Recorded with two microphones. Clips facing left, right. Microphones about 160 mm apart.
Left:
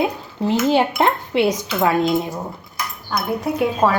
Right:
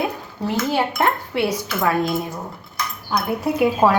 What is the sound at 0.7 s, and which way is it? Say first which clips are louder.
Speech: left 2 dB; 20° left (ahead or behind).